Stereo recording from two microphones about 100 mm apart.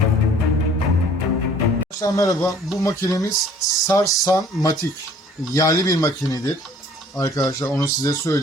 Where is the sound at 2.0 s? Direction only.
35° left (ahead or behind).